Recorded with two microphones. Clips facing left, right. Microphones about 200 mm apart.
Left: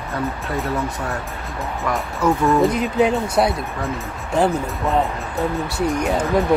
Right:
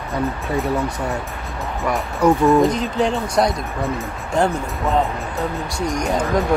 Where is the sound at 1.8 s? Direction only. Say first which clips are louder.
Right 3 dB; 15° right (ahead or behind).